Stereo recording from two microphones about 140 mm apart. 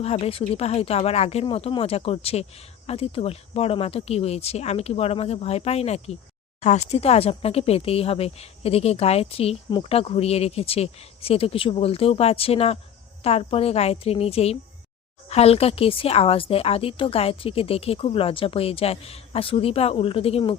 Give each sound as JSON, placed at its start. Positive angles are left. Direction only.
{"t": 0.0, "sound": "speech", "side_deg": 45}